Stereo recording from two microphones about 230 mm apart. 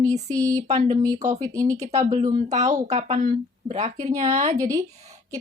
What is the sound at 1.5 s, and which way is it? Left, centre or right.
Speech, centre.